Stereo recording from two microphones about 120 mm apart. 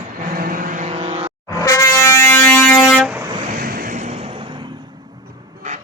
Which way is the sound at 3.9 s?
80° right.